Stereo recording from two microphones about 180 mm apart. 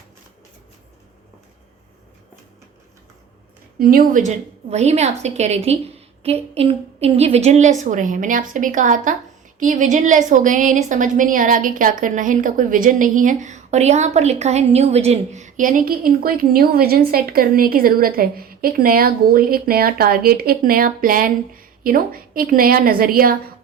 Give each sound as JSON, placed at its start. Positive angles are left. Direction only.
{"t": 3.8, "sound": "a woman's voice", "side_deg": -50}